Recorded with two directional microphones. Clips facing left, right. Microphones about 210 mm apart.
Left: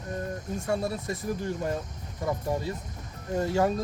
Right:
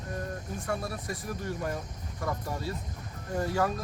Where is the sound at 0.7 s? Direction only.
25° left (ahead or behind).